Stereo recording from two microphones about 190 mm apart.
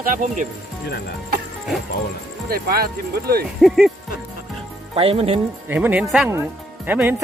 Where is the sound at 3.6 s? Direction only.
Centre (ahead or behind).